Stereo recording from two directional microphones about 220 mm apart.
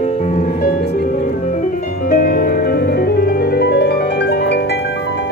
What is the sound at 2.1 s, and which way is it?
Music, 40° left (ahead or behind).